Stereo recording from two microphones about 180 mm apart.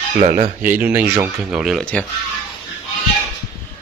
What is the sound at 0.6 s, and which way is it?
Speech, 10° right (ahead or behind).